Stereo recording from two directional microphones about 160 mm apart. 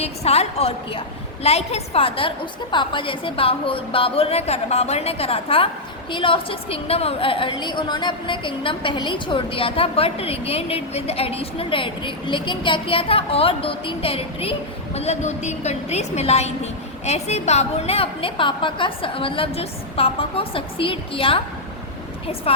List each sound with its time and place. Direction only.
0.0 s a woman's voice: 40° left (ahead or behind)